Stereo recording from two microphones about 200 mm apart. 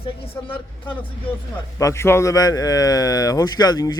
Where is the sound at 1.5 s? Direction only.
15° left (ahead or behind).